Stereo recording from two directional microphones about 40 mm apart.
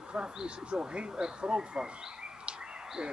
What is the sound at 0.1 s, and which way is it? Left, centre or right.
Speech, centre.